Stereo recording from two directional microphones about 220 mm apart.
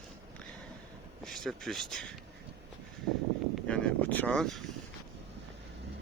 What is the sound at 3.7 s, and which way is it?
Speech, 5° left (ahead or behind).